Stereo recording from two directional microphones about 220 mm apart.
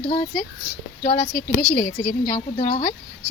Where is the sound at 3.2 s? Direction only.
15° right (ahead or behind).